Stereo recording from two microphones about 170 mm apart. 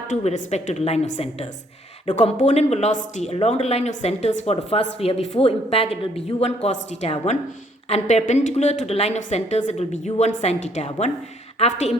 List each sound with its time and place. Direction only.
0.1 s a woman's voice: 45° left (ahead or behind)